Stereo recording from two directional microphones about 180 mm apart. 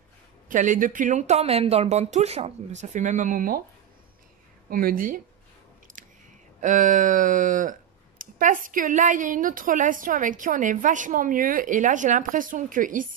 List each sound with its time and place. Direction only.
0.5 s speech: 45° right (ahead or behind)
4.6 s a woman's voice: 55° right (ahead or behind)
5.9 s chewing: 45° right (ahead or behind)
6.6 s a woman's voice: 45° right (ahead or behind)